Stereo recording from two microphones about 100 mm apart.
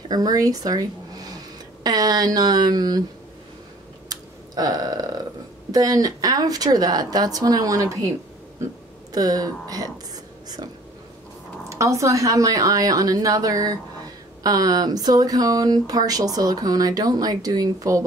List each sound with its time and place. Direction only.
0.1 s speech: 40° right (ahead or behind)
4.1 s a sound: 40° right (ahead or behind)
5.7 s speech: 40° right (ahead or behind)
9.1 s speech: 40° right (ahead or behind)
11.7 s speech: 30° right (ahead or behind)